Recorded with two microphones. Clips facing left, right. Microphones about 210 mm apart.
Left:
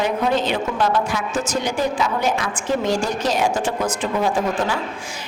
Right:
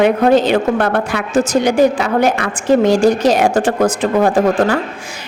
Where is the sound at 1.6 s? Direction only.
70° right (ahead or behind).